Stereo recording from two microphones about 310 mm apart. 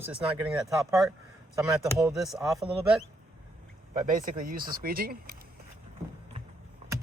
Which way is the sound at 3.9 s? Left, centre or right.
Right.